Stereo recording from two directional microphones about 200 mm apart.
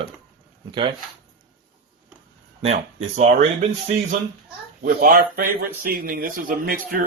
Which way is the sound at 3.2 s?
35° right (ahead or behind).